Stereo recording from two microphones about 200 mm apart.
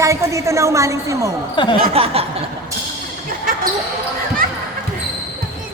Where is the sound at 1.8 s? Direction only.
30° right (ahead or behind).